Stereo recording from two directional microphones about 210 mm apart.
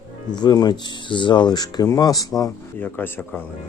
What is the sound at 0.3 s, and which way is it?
Speech, 20° left (ahead or behind).